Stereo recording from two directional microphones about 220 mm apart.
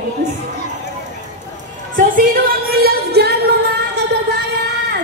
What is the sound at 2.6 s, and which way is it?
Music, 45° right (ahead or behind).